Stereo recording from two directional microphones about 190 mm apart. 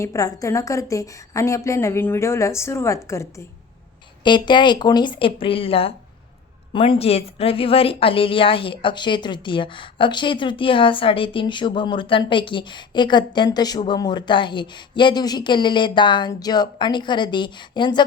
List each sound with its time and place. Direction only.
0.0 s a woman's voice: 15° left (ahead or behind)